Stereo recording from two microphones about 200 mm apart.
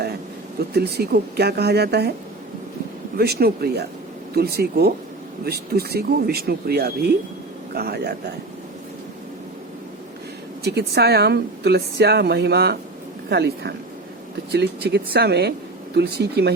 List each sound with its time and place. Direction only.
0.7 s speech: 55° right (ahead or behind)
3.2 s speech: 50° right (ahead or behind)
10.6 s speech: 55° right (ahead or behind)
14.8 s speech: 55° right (ahead or behind)